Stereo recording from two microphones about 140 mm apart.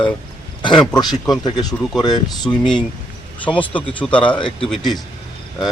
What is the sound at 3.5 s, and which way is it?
Speech, 5° right (ahead or behind).